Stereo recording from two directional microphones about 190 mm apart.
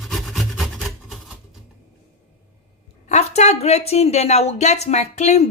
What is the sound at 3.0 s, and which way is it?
A woman's voice, 35° left (ahead or behind).